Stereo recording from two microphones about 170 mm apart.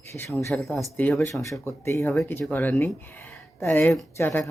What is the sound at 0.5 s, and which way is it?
Speech, 5° left (ahead or behind).